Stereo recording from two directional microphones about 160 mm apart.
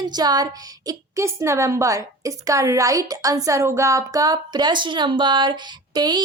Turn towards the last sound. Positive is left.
turn(degrees=-25)  # may be behind; listen again after turning